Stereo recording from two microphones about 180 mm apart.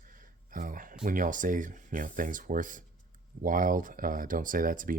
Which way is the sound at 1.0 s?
50° right (ahead or behind).